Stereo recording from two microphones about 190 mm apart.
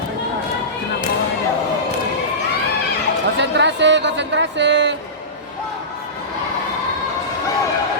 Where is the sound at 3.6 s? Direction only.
70° right (ahead or behind).